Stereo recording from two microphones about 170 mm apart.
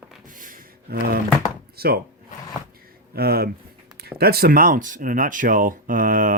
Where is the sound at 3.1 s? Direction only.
65° right (ahead or behind).